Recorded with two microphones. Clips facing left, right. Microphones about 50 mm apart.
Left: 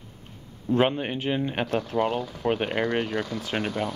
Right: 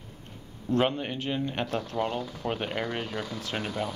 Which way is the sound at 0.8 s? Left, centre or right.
Left.